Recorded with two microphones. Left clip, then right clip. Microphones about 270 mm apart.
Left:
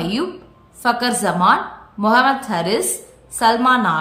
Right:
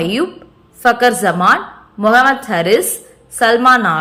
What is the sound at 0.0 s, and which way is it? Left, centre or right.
A woman's voice, centre.